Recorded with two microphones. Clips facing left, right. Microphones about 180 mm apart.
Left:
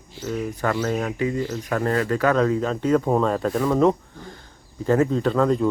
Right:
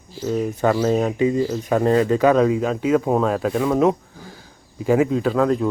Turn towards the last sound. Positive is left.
turn(degrees=-5)  # may be behind; listen again after turning